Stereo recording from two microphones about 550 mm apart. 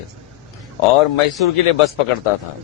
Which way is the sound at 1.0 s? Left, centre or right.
Left.